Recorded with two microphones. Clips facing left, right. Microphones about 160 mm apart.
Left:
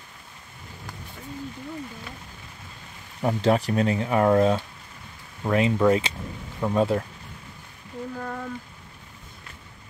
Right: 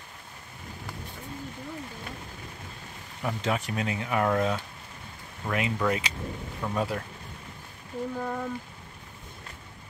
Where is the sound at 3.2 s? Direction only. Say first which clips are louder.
Left 8 dB; 35° left (ahead or behind).